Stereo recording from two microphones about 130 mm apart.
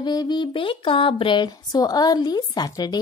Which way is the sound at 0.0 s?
30° left (ahead or behind).